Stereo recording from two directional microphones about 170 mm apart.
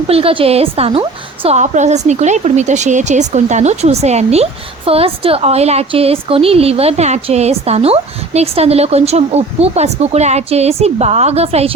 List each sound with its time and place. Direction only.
0.1 s a woman's voice: 35° right (ahead or behind)